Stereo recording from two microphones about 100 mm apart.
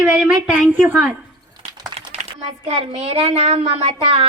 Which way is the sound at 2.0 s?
90° right.